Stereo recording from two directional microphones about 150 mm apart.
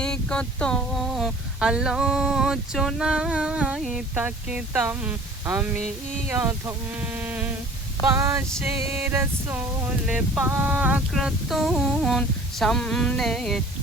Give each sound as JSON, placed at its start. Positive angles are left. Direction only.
{"t": 0.0, "sound": "speech", "side_deg": 5}
{"t": 11.1, "sound": "humming", "side_deg": 0}